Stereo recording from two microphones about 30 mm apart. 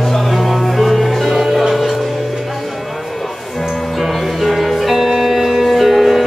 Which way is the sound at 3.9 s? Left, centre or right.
Centre.